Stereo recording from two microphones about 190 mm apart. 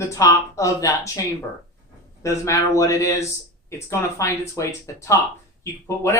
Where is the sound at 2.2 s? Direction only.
15° left (ahead or behind).